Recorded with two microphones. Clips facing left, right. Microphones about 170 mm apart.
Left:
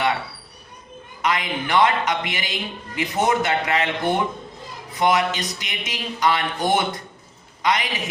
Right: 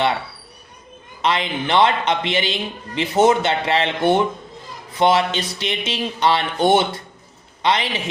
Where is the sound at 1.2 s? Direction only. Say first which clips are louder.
Right 3 dB; 30° right (ahead or behind).